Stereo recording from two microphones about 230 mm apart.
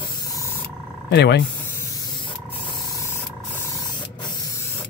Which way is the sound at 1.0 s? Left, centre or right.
Left.